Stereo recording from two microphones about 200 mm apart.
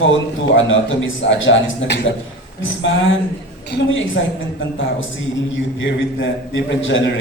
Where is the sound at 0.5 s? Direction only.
75° left (ahead or behind).